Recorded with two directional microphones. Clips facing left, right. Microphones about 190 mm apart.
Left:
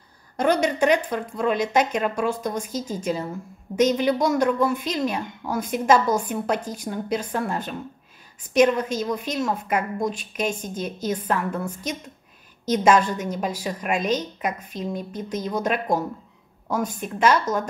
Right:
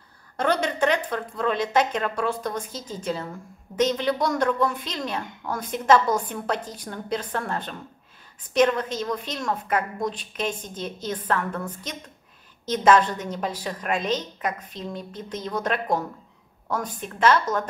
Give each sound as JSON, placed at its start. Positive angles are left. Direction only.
{"t": 0.4, "sound": "a woman's voice", "side_deg": 10}